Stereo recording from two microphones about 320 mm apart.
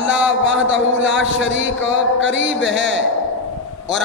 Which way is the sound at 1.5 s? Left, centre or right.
Right.